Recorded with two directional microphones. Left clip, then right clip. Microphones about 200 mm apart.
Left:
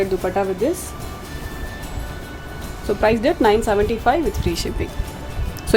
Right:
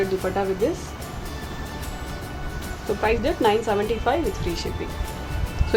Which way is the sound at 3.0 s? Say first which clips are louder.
Left 5 dB; 55° left (ahead or behind).